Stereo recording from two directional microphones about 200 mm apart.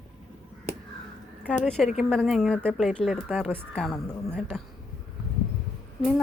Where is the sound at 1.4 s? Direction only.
5° left (ahead or behind).